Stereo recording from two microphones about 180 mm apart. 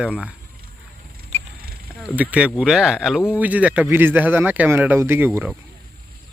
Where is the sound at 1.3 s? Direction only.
40° right (ahead or behind).